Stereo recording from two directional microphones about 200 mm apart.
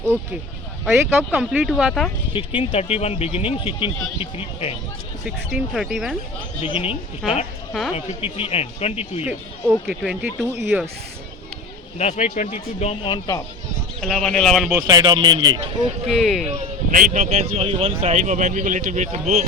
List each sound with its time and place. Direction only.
0.9 s speech: 5° right (ahead or behind)
2.3 s speech: 25° left (ahead or behind)
5.2 s speech: 5° right (ahead or behind)
6.6 s speech: 30° left (ahead or behind)
7.7 s speech: centre (ahead or behind)
7.9 s speech: 30° left (ahead or behind)
9.2 s speech: 5° right (ahead or behind)
11.9 s speech: 35° left (ahead or behind)
14.0 s speech: 5° left (ahead or behind)
14.8 s speech: 15° right (ahead or behind)
16.0 s speech: centre (ahead or behind)
16.5 s speech: 40° right (ahead or behind)